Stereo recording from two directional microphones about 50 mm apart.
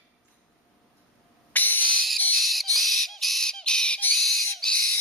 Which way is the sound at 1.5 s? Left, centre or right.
Left.